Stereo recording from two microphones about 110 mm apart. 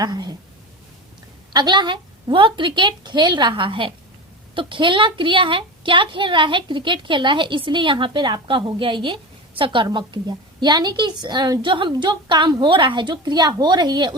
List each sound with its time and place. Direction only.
0.0 s a woman's voice: 35° right (ahead or behind)
1.5 s a woman's voice: 40° right (ahead or behind)